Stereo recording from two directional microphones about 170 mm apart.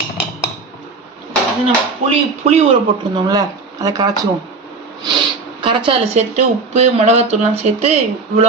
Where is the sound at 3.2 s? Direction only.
20° right (ahead or behind).